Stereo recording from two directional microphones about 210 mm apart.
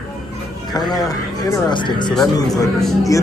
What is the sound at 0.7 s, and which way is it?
Speech, 20° left (ahead or behind).